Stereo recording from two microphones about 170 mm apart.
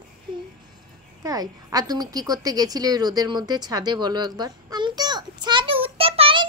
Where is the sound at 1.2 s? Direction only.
20° right (ahead or behind).